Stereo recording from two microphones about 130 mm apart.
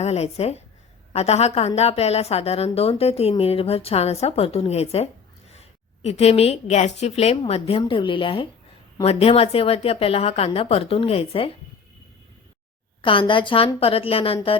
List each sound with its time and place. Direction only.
0.0 s a woman's voice: 55° left (ahead or behind)
13.0 s a woman's voice: 40° left (ahead or behind)